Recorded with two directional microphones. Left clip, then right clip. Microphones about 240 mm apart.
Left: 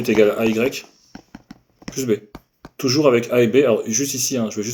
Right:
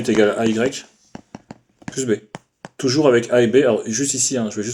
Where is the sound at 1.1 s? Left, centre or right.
Centre.